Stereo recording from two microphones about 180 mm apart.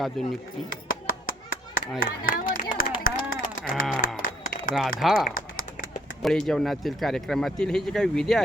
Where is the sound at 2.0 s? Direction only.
50° left (ahead or behind).